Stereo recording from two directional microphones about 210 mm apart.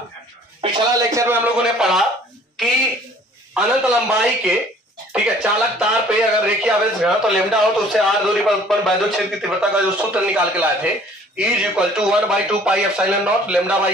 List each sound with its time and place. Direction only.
0.6 s speech: 15° right (ahead or behind)
1.6 s speech: centre (ahead or behind)
3.5 s speech: 5° right (ahead or behind)